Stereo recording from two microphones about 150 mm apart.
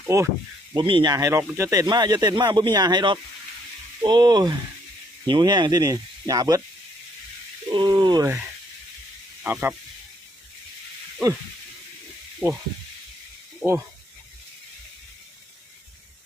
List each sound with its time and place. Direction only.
0.1 s speech: 20° right (ahead or behind)
0.7 s speech: 35° right (ahead or behind)
1.1 s speech: 20° right (ahead or behind)
7.7 s speech: 30° right (ahead or behind)
9.4 s speech: 10° right (ahead or behind)
12.4 s speech: 15° right (ahead or behind)
13.6 s speech: 10° right (ahead or behind)